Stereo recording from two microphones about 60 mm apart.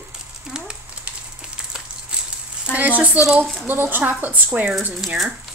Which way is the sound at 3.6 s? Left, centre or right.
Right.